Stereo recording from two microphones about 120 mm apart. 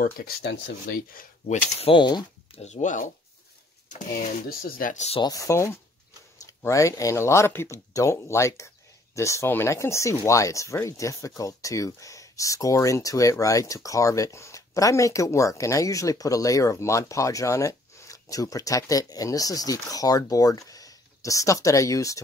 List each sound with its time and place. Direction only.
1.9 s speech: 40° left (ahead or behind)
2.5 s speech: 75° left (ahead or behind); by 3.1 s 90° left
4.9 s speech: 65° left (ahead or behind)
5.2 s speech: 30° left (ahead or behind)